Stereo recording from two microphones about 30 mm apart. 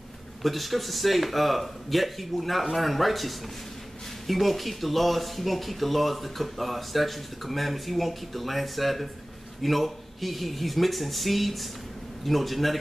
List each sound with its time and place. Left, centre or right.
0.4 s speech: centre